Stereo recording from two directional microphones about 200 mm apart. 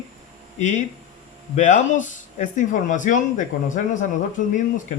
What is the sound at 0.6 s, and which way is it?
Speech, 40° left (ahead or behind).